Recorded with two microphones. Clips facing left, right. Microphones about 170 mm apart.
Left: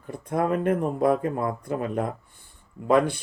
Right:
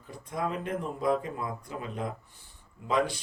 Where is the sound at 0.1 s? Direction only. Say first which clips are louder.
Left 8 dB; 55° left (ahead or behind).